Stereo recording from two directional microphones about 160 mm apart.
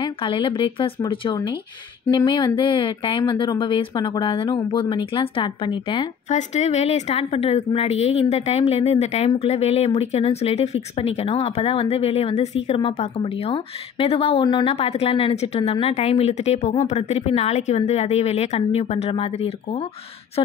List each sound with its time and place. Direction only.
0.0 s a woman's voice: 30° left (ahead or behind)
6.2 s a woman's voice: 45° left (ahead or behind)